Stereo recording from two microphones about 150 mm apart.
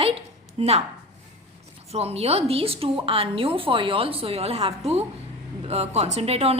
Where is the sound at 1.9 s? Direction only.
45° right (ahead or behind).